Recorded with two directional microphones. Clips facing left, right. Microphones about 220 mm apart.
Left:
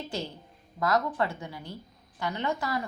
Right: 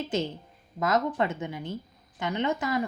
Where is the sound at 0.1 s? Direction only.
20° right (ahead or behind).